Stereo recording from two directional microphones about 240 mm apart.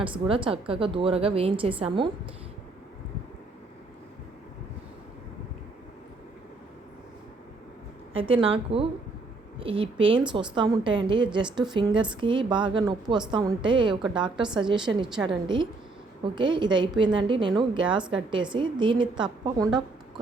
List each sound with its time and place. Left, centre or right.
0.0 s a woman's voice: right
8.1 s a woman's voice: right